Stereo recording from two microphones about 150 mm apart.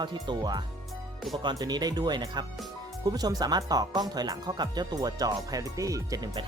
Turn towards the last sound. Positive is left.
turn(degrees=-25)  # may be behind; listen again after turning